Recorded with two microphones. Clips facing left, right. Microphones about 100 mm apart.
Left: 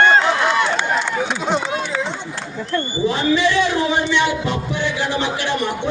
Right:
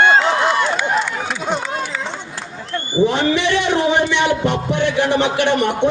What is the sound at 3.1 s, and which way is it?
Speech, 65° right (ahead or behind).